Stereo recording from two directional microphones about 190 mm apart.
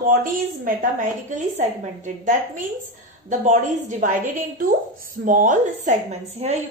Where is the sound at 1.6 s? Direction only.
40° right (ahead or behind).